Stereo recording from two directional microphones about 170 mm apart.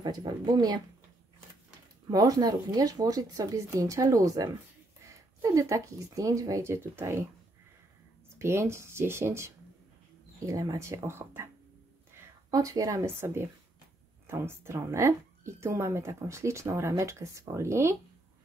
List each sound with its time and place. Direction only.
0.0 s speech: 25° right (ahead or behind)
2.0 s speech: 20° right (ahead or behind)
8.4 s a woman's voice: 15° right (ahead or behind)